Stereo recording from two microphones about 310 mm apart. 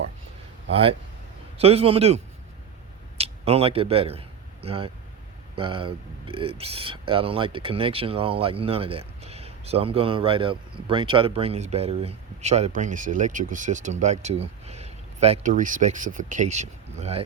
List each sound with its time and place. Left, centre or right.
0.7 s a man's voice: centre